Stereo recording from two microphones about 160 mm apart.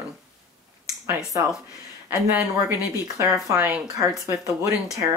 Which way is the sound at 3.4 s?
15° right (ahead or behind).